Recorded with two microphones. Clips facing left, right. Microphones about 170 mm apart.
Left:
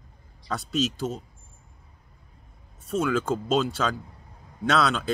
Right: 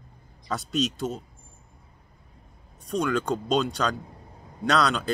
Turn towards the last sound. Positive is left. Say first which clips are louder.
# even
turn(degrees=0)  # may be behind; listen again after turning